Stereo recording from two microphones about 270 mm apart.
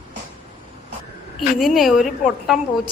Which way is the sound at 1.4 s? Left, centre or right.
Centre.